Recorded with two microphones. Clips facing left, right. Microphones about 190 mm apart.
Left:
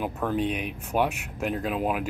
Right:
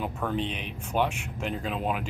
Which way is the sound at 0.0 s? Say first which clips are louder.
Left 3 dB; 5° left (ahead or behind).